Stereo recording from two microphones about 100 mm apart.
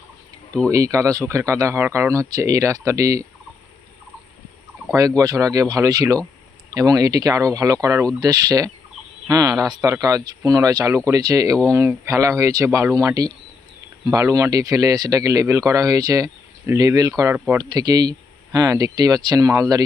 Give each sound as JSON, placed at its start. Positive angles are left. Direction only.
{"t": 0.7, "sound": "speech", "side_deg": -35}
{"t": 4.9, "sound": "speech", "side_deg": -35}